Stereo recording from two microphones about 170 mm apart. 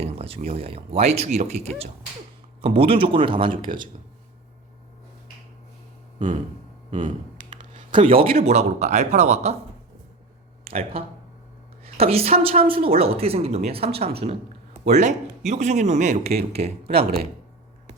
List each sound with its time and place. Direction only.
0.0 s speech: 35° right (ahead or behind)
6.1 s a sound: 30° right (ahead or behind)
7.6 s a sound: 45° right (ahead or behind)
7.9 s speech: 30° right (ahead or behind)
10.6 s a man's voice: 35° right (ahead or behind)
16.2 s speech: 65° right (ahead or behind)
16.6 s speech: 40° right (ahead or behind)